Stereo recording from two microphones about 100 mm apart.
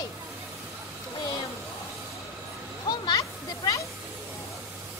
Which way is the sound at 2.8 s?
45° left (ahead or behind).